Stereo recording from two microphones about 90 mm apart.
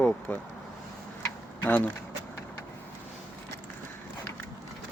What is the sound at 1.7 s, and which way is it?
Speech, 20° left (ahead or behind).